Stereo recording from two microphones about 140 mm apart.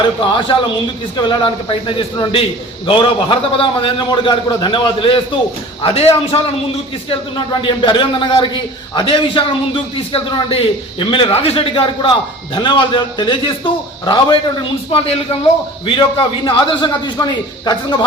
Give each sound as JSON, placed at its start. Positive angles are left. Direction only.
{"t": 0.0, "sound": "a man's voice", "side_deg": 35}
{"t": 7.6, "sound": "a man's voice", "side_deg": 35}